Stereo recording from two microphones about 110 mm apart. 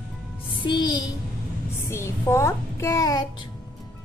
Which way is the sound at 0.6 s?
45° left (ahead or behind).